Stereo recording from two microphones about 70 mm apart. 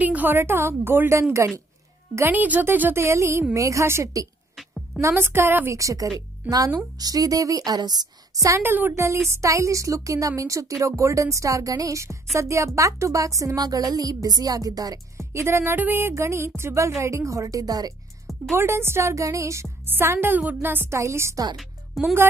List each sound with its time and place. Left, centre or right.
0.0 s a woman's voice: right
2.3 s a woman's voice: right
5.1 s a woman's voice: right
5.8 s a woman's voice: right
6.4 s speech: right
7.0 s a woman's voice: right
8.6 s speech: right
8.9 s a woman's voice: right
15.1 s music: right
16.2 s a woman's voice: right
18.5 s a woman's voice: right
19.8 s a woman's voice: right
21.5 s music: centre